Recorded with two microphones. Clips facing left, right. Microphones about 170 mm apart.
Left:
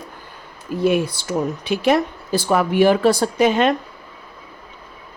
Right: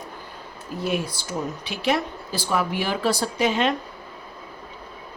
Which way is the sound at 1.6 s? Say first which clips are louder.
Left 7 dB; 50° left (ahead or behind).